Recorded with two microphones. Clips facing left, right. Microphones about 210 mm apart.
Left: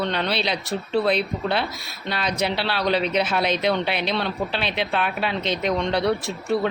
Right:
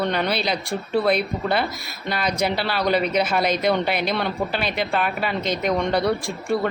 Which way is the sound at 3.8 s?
45° right (ahead or behind).